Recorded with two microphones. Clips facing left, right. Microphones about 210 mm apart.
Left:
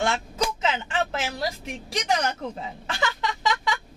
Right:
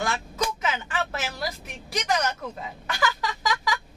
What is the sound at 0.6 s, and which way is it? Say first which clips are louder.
A woman's voice: left 3 dB; 25° left (ahead or behind).